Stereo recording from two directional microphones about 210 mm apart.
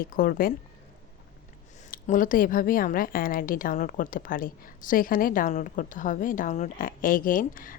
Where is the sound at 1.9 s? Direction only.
40° left (ahead or behind).